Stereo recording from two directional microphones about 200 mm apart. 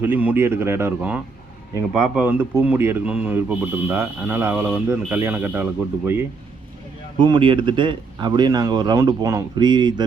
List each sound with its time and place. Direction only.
0.0 s speech: 10° right (ahead or behind)
7.2 s speech: 25° right (ahead or behind)